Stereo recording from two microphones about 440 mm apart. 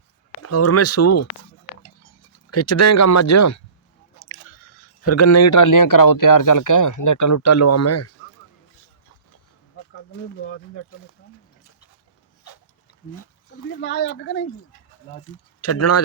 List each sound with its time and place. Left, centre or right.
0.4 s speech: left
4.2 s chewing: left
5.0 s speech: left
10.4 s speech: left
13.7 s speech: left